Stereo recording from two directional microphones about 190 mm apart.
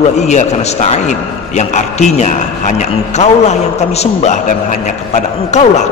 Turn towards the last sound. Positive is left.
turn(degrees=35)  # may be behind; listen again after turning